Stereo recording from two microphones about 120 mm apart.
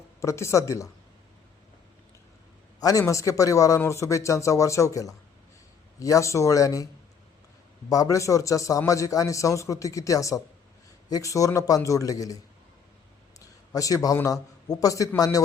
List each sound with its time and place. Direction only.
0.2 s speech: 25° left (ahead or behind)
3.1 s speech: 25° left (ahead or behind)
7.9 s speech: 30° left (ahead or behind)
13.7 s speech: 30° left (ahead or behind)